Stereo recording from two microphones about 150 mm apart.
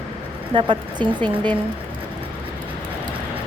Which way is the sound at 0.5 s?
30° right (ahead or behind).